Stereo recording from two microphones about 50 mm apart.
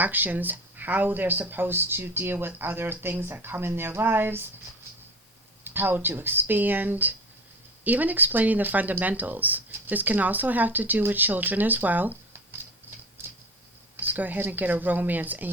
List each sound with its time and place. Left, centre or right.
0.0 s speech: right
5.6 s speech: right
13.9 s speech: right